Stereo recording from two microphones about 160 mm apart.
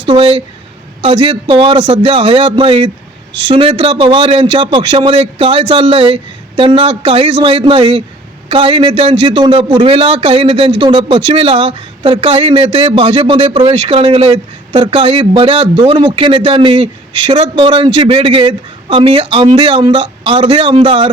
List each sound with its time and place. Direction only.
0.1 s a man's voice: 35° right (ahead or behind)